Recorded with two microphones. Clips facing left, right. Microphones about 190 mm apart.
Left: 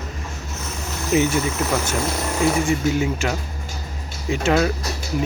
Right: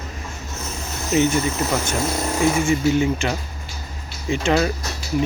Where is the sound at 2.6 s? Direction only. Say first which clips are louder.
Right 2 dB; 5° left (ahead or behind).